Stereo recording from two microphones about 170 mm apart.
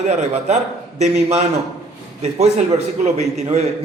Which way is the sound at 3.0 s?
40° right (ahead or behind).